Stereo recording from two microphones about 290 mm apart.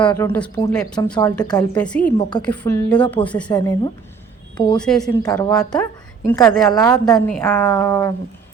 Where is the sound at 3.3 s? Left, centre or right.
Centre.